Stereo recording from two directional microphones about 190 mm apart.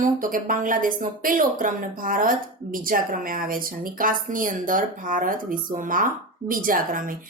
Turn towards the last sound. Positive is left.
turn(degrees=-45)  # may be behind; listen again after turning